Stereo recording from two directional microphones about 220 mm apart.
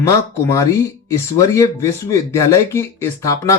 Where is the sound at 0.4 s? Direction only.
15° left (ahead or behind).